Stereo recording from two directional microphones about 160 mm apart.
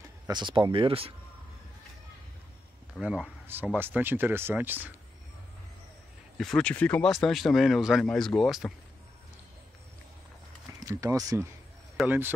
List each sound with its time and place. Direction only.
0.3 s speech: 30° right (ahead or behind)
3.0 s speech: 5° right (ahead or behind)
6.3 s speech: 5° left (ahead or behind)
10.9 s speech: 20° right (ahead or behind)
12.0 s speech: centre (ahead or behind)